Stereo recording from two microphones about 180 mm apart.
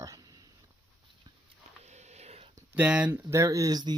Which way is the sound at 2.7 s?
5° right (ahead or behind).